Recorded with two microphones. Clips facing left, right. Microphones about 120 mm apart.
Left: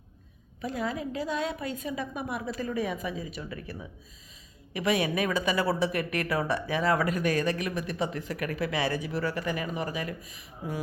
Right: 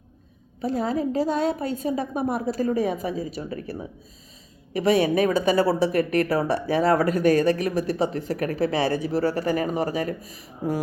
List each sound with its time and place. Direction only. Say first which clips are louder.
0.6 s a woman's voice: right 7 dB; 30° right (ahead or behind)